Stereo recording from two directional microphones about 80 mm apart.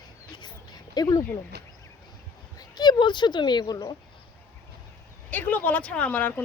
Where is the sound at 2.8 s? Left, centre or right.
Left.